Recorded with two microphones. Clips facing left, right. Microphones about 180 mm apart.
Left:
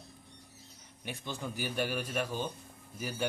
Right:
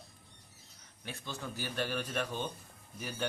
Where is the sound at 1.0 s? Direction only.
15° left (ahead or behind).